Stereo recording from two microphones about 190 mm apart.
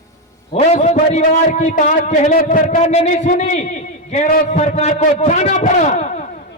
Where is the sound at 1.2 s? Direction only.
40° left (ahead or behind).